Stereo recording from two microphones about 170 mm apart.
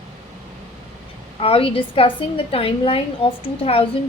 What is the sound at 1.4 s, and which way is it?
A woman's voice, 35° left (ahead or behind).